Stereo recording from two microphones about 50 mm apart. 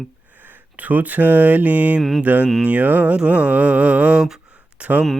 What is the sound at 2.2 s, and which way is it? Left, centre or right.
Speech, right.